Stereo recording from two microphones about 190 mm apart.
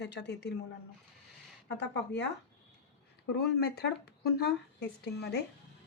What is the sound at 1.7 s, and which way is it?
Speech, 65° left (ahead or behind).